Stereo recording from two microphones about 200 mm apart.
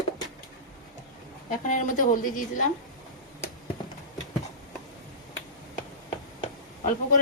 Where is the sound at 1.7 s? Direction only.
40° left (ahead or behind).